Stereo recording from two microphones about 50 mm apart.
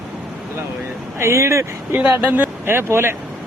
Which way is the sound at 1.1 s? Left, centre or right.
Right.